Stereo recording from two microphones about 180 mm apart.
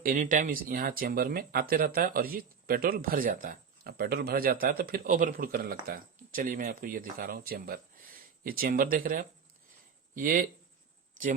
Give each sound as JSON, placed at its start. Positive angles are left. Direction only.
{"t": 0.0, "sound": "speech", "side_deg": -45}